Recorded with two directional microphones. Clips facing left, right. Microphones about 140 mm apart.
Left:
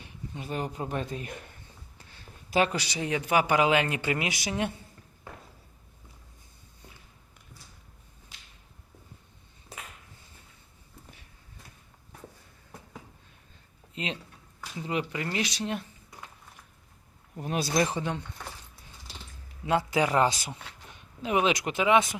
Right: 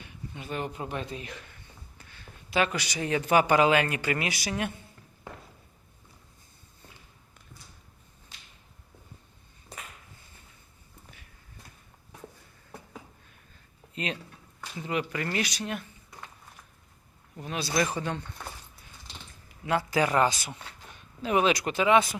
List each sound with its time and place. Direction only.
0.0 s speech: 35° left (ahead or behind)
2.0 s a sound: 30° left (ahead or behind)
3.0 s speech: 10° left (ahead or behind)
13.9 s a sound: 20° left (ahead or behind)
14.8 s speech: 25° left (ahead or behind)
17.4 s speech: 45° left (ahead or behind)
17.8 s speech: 20° left (ahead or behind)
19.6 s speech: 20° left (ahead or behind)